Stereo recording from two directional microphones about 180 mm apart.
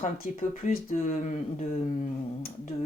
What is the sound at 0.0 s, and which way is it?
Speech, 45° left (ahead or behind).